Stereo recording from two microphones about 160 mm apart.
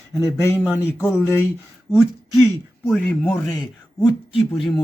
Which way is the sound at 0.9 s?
Centre (ahead or behind).